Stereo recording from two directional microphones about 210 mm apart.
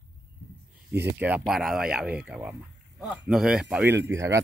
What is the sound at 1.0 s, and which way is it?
Speech, 5° right (ahead or behind).